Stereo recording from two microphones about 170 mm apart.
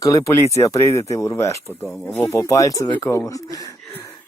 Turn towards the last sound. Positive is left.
turn(degrees=20)  # may be behind; listen again after turning